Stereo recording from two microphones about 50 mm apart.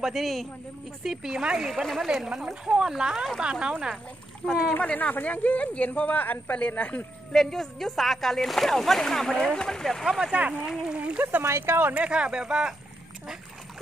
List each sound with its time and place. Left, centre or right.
0.0 s speech: centre
1.0 s speech: centre
4.8 s speech: left
7.3 s speech: centre
10.0 s speech: centre
10.3 s speech: right
10.6 s speech: centre
10.9 s speech: right
11.4 s speech: right
11.9 s speech: right